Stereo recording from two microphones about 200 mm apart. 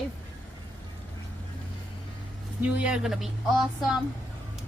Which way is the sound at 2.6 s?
5° right (ahead or behind).